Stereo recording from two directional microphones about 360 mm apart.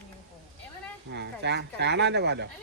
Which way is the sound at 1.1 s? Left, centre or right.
Right.